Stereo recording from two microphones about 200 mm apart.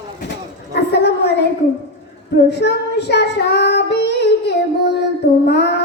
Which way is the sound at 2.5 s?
60° left (ahead or behind).